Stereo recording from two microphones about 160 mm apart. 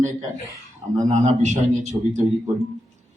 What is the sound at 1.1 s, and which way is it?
A man's voice, 45° right (ahead or behind).